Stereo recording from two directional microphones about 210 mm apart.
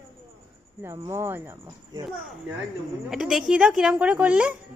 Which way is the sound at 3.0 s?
Centre (ahead or behind).